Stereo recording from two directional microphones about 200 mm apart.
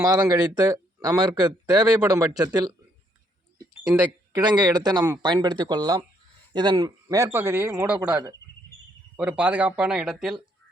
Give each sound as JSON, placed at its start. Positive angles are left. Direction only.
{"t": 0.0, "sound": "speech", "side_deg": -20}
{"t": 4.3, "sound": "a man's voice", "side_deg": -20}